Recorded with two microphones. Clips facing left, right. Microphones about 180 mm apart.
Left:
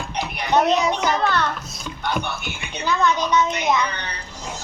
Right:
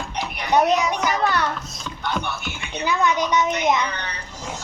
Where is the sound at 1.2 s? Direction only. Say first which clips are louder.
Even; 10° right (ahead or behind).